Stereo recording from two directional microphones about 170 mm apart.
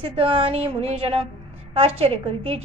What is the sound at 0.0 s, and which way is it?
A woman's voice, 30° right (ahead or behind).